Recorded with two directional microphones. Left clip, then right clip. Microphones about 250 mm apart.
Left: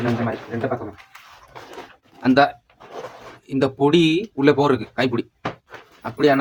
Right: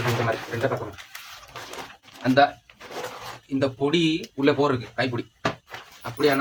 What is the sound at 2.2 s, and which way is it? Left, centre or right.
Speech, left.